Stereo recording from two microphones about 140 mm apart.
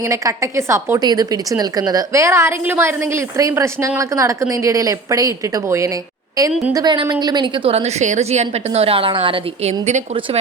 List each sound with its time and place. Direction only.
0.0 s a woman's voice: 20° right (ahead or behind)
6.7 s a woman's voice: 30° right (ahead or behind); by 10.0 s 50° right (ahead or behind)